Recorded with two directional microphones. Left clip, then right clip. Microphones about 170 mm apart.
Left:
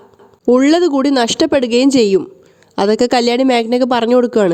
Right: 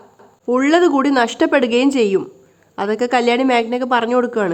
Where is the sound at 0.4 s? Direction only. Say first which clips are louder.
Left 3 dB; 45° left (ahead or behind).